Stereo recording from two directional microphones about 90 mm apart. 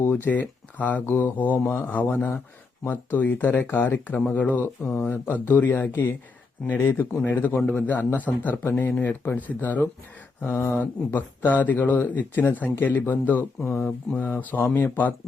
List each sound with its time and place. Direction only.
0.0 s speech: 20° left (ahead or behind)
14.7 s speech: 20° left (ahead or behind)